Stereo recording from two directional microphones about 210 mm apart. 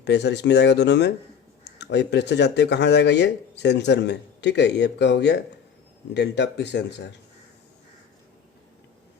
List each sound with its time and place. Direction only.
0.0 s speech: 55° left (ahead or behind)